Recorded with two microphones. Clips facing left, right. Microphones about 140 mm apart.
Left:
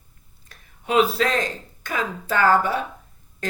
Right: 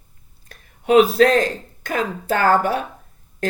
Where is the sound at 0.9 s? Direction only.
50° right (ahead or behind).